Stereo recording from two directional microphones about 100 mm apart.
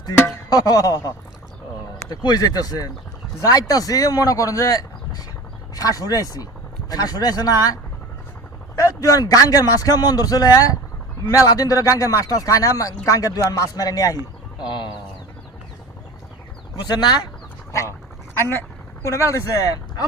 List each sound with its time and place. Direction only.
0.5 s speech: 35° left (ahead or behind)
14.6 s speech: 50° left (ahead or behind)
17.7 s speech: 30° left (ahead or behind)